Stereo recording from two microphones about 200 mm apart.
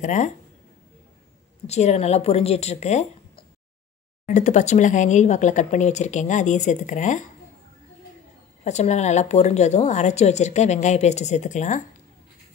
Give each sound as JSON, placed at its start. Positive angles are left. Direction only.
{"t": 0.0, "sound": "speech", "side_deg": 35}
{"t": 1.7, "sound": "speech", "side_deg": 35}
{"t": 8.6, "sound": "speech", "side_deg": 35}